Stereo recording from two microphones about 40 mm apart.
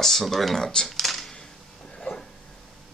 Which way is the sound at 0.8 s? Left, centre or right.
Centre.